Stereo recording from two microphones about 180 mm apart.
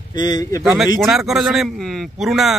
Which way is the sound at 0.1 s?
25° left (ahead or behind).